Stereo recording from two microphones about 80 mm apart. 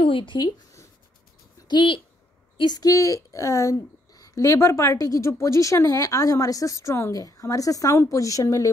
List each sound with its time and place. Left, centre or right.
0.0 s speech: left
1.7 s speech: left